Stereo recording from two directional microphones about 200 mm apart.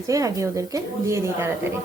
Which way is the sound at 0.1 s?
15° right (ahead or behind).